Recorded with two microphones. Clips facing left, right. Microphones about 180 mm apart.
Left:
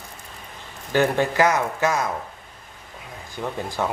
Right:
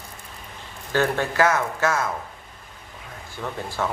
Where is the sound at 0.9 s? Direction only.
15° left (ahead or behind).